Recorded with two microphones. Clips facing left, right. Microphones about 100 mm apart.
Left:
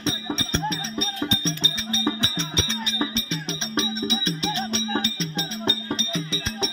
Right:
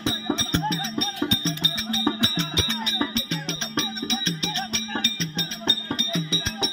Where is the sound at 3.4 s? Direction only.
5° left (ahead or behind).